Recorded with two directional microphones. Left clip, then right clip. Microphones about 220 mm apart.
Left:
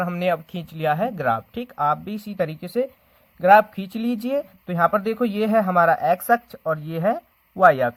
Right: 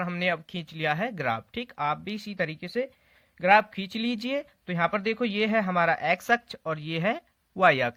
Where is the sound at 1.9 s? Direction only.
55° right (ahead or behind).